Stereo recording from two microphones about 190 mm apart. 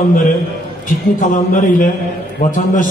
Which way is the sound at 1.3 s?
45° left (ahead or behind).